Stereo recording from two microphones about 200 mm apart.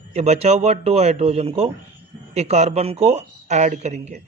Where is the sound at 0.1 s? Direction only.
35° right (ahead or behind).